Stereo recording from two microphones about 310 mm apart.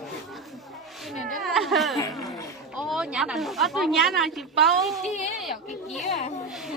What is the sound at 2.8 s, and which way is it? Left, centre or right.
A woman's voice, centre.